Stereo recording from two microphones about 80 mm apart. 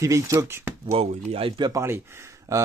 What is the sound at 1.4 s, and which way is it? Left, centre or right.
Speech, right.